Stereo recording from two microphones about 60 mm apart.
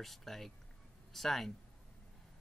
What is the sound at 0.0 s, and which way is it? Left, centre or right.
Speech, centre.